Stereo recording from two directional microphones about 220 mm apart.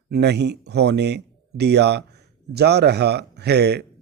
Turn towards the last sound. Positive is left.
turn(degrees=-50)  # may be behind; listen again after turning